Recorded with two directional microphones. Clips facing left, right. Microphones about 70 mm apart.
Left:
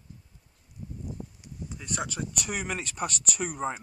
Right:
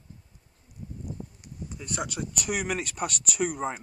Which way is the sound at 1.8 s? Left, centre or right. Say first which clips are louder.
Right 1 dB; centre.